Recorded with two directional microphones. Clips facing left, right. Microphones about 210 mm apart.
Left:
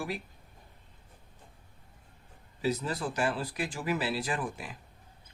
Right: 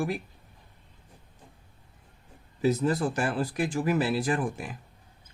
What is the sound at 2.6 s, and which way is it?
Speech, 50° right (ahead or behind).